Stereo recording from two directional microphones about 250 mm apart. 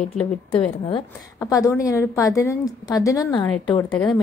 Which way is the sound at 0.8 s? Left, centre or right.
Centre.